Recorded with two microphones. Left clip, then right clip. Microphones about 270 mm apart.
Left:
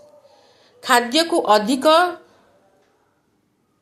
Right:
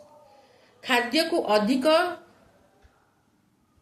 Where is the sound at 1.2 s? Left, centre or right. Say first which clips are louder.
Left 7 dB; left.